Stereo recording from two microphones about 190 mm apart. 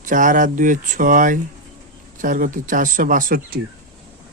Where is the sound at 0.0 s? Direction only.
45° right (ahead or behind).